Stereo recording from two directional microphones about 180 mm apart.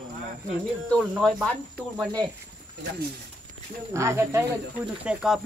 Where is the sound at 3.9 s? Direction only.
15° right (ahead or behind).